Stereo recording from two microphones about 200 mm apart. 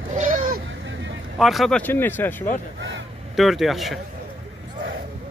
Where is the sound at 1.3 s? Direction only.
Centre (ahead or behind).